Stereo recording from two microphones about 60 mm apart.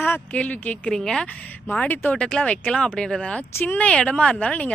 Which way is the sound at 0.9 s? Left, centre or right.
Centre.